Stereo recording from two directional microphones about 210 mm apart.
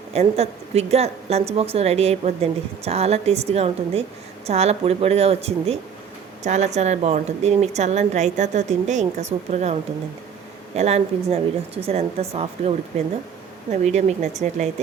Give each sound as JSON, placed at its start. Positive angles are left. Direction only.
{"t": 0.1, "sound": "a woman's voice", "side_deg": -30}
{"t": 10.8, "sound": "a woman's voice", "side_deg": -30}